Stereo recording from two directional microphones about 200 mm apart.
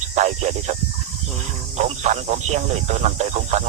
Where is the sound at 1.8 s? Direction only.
35° right (ahead or behind).